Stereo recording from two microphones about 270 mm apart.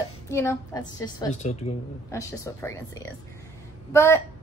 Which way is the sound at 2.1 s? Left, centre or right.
Centre.